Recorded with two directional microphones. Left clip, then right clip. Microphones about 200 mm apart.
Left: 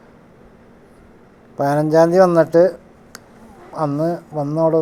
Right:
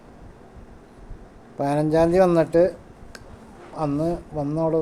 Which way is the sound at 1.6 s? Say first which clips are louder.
Left 6 dB; 15° left (ahead or behind).